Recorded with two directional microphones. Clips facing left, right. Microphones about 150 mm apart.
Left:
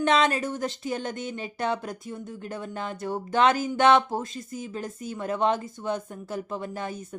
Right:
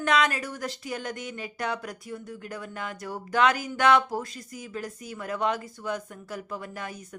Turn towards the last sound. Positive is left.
turn(degrees=25)  # may be behind; listen again after turning